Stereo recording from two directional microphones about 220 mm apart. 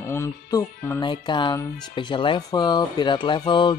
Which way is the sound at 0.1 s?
10° left (ahead or behind).